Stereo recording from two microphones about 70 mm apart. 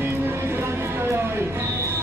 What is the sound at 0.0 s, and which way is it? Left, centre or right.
Music, right.